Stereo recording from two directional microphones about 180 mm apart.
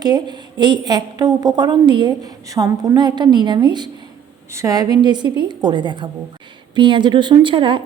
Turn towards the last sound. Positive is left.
turn(degrees=-25)  # may be behind; listen again after turning